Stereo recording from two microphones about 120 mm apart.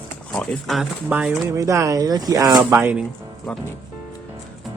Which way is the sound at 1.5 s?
25° right (ahead or behind).